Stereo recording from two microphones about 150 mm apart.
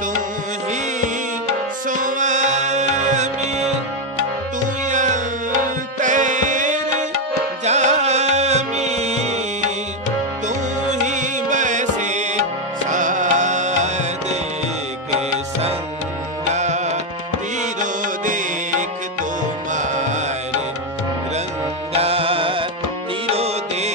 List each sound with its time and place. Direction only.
1.9 s music: 60° right (ahead or behind)
4.8 s music: 55° right (ahead or behind)
10.8 s music: 55° right (ahead or behind)
16.5 s music: 50° right (ahead or behind)
21.9 s music: 40° right (ahead or behind)